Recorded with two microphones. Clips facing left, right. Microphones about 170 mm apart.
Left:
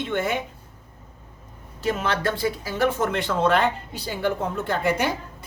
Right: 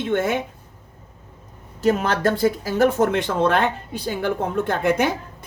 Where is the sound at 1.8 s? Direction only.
45° right (ahead or behind).